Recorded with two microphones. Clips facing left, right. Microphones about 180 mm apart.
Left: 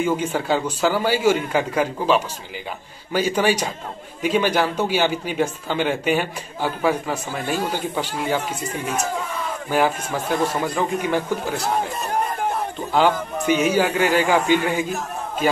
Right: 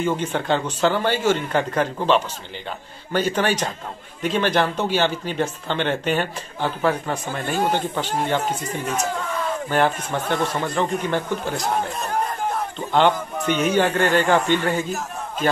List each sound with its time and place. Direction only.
0.0 s speech: 10° left (ahead or behind)
12.9 s speech: 5° left (ahead or behind)